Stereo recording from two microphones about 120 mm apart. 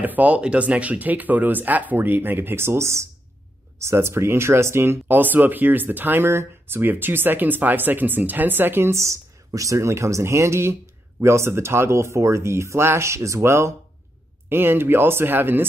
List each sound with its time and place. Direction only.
0.0 s speech: 15° right (ahead or behind)